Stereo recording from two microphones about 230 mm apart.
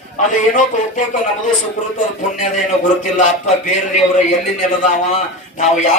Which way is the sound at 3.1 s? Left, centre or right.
Left.